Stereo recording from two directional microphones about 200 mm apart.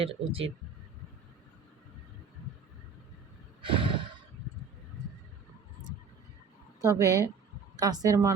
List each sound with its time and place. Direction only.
0.0 s speech: 25° right (ahead or behind)
3.6 s sigh: 25° right (ahead or behind)
6.8 s speech: 15° right (ahead or behind)